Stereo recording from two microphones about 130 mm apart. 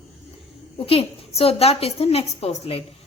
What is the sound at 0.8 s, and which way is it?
A woman's voice, 50° left (ahead or behind).